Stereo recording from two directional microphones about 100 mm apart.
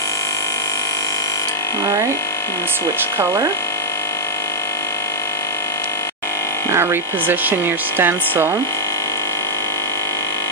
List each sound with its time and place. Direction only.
6.7 s speech: 25° right (ahead or behind)